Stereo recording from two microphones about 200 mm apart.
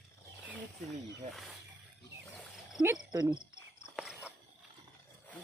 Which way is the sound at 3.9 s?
5° right (ahead or behind).